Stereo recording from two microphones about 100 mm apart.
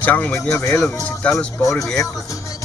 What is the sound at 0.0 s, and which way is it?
Speech, 20° left (ahead or behind).